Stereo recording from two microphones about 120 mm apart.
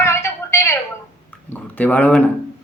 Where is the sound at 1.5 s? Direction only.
15° left (ahead or behind).